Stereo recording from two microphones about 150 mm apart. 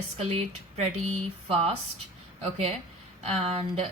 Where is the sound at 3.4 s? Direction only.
40° right (ahead or behind).